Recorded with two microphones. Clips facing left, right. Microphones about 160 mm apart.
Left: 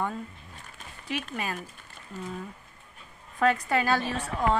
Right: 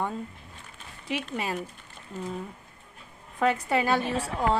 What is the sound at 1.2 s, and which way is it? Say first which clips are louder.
Speech: right 2 dB; 25° right (ahead or behind).